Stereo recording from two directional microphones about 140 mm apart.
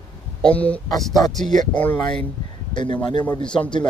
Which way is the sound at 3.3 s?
5° left (ahead or behind).